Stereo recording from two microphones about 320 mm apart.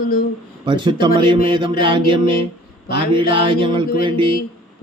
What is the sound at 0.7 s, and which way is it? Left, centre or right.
Mantra, centre.